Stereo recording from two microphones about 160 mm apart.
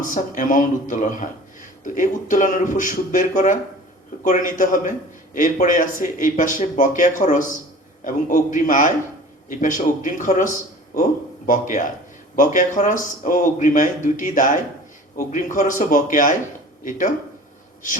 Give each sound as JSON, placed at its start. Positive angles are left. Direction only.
{"t": 0.0, "sound": "speech", "side_deg": 55}